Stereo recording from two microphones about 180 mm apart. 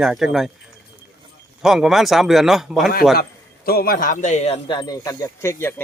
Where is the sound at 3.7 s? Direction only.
55° left (ahead or behind).